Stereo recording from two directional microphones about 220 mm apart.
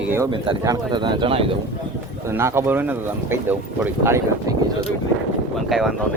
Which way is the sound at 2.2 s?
10° right (ahead or behind).